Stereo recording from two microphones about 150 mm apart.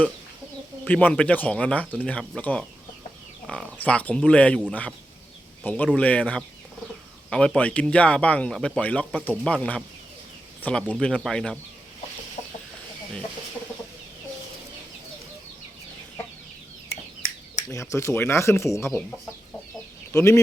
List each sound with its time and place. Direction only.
0.9 s speech: 10° left (ahead or behind)
3.8 s speech: 10° left (ahead or behind)
12.4 s chicken: 45° left (ahead or behind)
17.7 s speech: 20° left (ahead or behind)
20.1 s speech: 20° left (ahead or behind)